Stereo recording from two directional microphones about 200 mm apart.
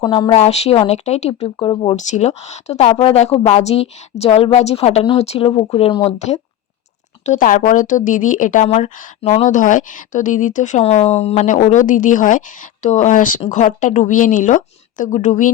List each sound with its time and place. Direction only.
0.0 s speech: 20° left (ahead or behind); by 15.5 s 40° left (ahead or behind)